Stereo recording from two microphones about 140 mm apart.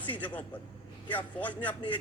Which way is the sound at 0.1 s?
10° left (ahead or behind).